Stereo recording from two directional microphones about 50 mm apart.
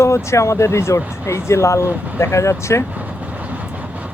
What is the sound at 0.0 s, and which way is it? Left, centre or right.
Speech, left.